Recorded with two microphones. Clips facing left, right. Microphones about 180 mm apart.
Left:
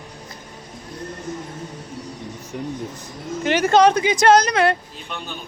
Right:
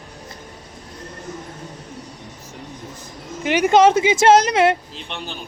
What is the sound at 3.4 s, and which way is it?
Speech, 10° right (ahead or behind).